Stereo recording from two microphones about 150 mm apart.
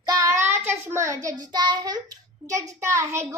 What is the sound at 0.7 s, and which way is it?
A child's voice, 15° right (ahead or behind).